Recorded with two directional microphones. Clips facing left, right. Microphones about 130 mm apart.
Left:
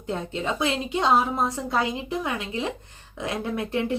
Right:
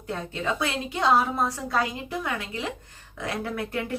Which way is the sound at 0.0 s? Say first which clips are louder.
Left 2 dB; 25° left (ahead or behind).